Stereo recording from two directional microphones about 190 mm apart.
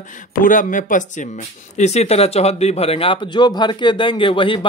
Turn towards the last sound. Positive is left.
turn(degrees=25)  # may be behind; listen again after turning